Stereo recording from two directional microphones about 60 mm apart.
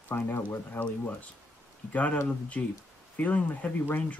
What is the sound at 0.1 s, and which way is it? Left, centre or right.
Speech, left.